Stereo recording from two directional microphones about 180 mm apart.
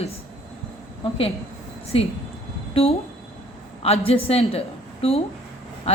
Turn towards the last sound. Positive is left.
turn(degrees=30)  # may be behind; listen again after turning